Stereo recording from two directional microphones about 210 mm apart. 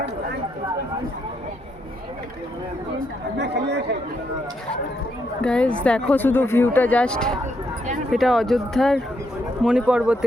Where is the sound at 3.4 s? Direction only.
55° right (ahead or behind).